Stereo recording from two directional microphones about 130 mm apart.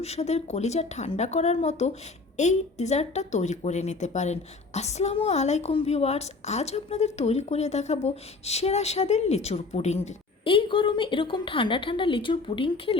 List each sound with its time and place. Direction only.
0.0 s a woman's voice: 55° left (ahead or behind)
10.4 s a woman's voice: 40° left (ahead or behind)